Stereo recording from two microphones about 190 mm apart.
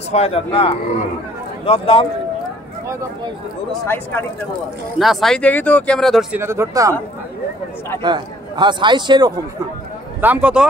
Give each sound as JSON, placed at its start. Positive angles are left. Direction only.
{"t": 0.1, "sound": "a man's voice", "side_deg": 30}
{"t": 3.8, "sound": "speech", "side_deg": 10}
{"t": 4.9, "sound": "speech", "side_deg": 0}
{"t": 6.4, "sound": "speech", "side_deg": -15}
{"t": 8.0, "sound": "a man's voice", "side_deg": -25}
{"t": 10.2, "sound": "speech", "side_deg": -5}